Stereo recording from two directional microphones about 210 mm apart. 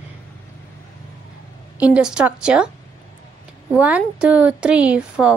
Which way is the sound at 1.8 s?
5° right (ahead or behind).